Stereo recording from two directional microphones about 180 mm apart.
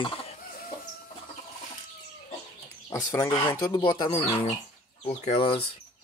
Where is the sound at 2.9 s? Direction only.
15° left (ahead or behind).